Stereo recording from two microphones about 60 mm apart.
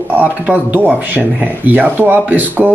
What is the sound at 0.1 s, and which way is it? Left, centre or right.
Speech, right.